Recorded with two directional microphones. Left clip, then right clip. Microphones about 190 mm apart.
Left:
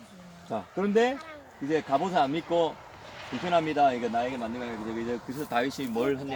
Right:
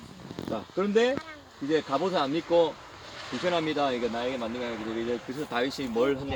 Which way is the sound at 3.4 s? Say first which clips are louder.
Left 3 dB; 45° left (ahead or behind).